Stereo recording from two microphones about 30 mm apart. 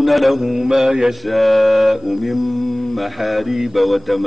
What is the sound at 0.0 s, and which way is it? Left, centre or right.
Mantra, centre.